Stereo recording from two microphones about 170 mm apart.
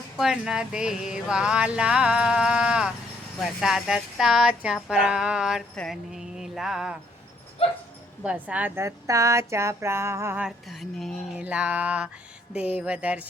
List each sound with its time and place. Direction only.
0.2 s speech: 5° right (ahead or behind)
7.6 s dog: 35° left (ahead or behind)
8.2 s a woman's voice: 5° right (ahead or behind)